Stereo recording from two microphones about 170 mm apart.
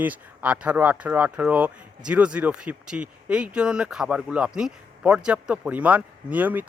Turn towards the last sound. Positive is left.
turn(degrees=-10)  # may be behind; listen again after turning